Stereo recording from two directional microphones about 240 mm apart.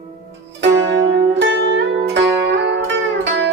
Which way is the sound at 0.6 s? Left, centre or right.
Right.